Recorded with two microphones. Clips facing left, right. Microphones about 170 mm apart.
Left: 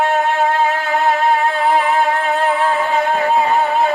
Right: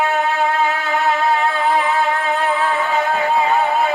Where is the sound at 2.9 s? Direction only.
40° left (ahead or behind).